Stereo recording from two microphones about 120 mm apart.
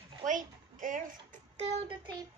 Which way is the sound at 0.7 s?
90° right.